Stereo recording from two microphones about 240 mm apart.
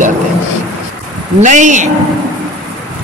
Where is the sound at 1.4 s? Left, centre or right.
Right.